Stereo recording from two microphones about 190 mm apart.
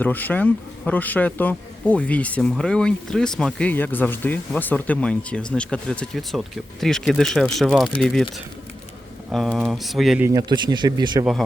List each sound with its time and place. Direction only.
0.0 s a man's voice: 10° left (ahead or behind)
9.3 s speech: centre (ahead or behind)
10.2 s speech: 20° right (ahead or behind)